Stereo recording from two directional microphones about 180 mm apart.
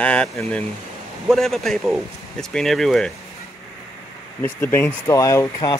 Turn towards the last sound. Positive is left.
turn(degrees=20)  # may be behind; listen again after turning